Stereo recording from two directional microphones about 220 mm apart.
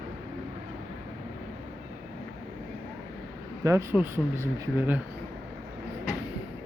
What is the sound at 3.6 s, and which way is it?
Speech, 15° right (ahead or behind).